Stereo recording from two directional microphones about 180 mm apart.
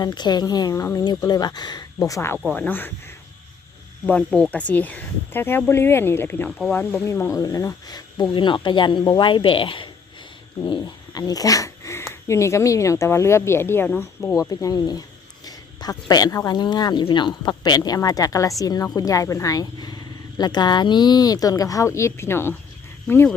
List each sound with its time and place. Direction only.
0.0 s speech: 25° left (ahead or behind)
4.0 s speech: 5° left (ahead or behind)
14.5 s speech: 20° left (ahead or behind)